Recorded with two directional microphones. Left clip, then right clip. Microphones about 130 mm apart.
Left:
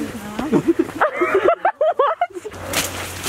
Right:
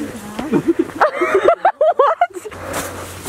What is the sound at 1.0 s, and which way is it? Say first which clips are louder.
Bow-wow: right 4 dB; 30° right (ahead or behind).